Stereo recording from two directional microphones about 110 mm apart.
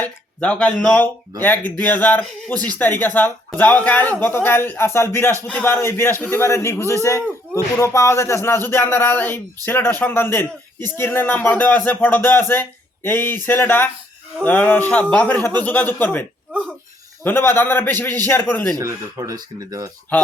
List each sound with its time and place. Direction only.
0.0 s a man's voice: 10° left (ahead or behind)
17.2 s speech: 20° left (ahead or behind)
18.7 s speech: 30° right (ahead or behind)
20.1 s speech: 15° left (ahead or behind)